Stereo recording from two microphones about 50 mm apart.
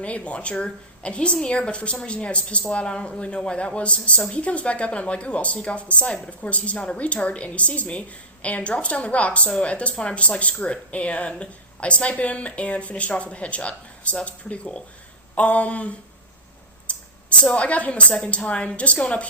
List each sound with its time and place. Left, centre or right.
0.0 s a woman's voice: left